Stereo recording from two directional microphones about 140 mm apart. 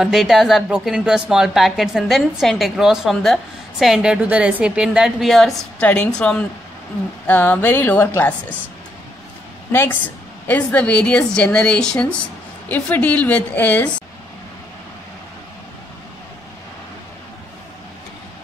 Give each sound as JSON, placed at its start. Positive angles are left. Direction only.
{"t": 0.0, "sound": "a woman's voice", "side_deg": 0}
{"t": 9.7, "sound": "a woman's voice", "side_deg": 15}